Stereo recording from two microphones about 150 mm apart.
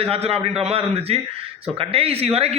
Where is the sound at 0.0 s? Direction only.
40° right (ahead or behind).